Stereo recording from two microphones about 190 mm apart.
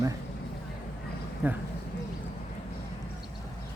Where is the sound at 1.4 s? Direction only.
10° right (ahead or behind).